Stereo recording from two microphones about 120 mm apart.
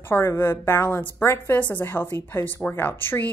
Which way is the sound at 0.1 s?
20° left (ahead or behind).